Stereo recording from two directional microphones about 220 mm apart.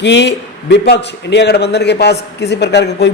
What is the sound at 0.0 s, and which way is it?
A man's voice, 50° left (ahead or behind).